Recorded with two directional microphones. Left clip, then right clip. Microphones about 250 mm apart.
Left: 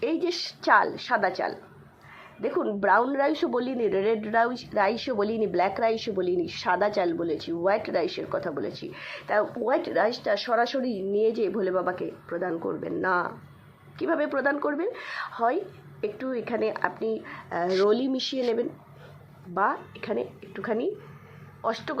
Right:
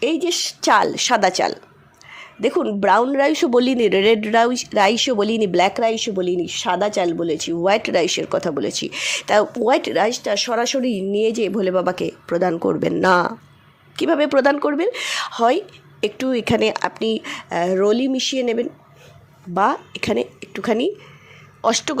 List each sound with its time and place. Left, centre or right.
0.0 s speech: right
3.8 s speech: right
19.5 s speech: right